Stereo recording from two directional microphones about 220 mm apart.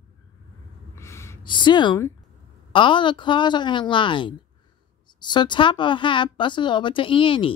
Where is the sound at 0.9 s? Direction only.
10° left (ahead or behind).